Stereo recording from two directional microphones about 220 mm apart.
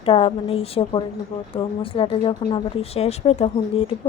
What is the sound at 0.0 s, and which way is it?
Speech, 25° left (ahead or behind).